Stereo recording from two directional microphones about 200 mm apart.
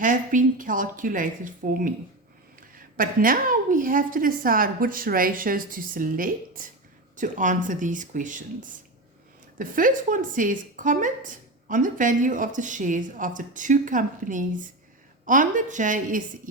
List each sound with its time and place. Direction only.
0.0 s a woman's voice: 40° right (ahead or behind)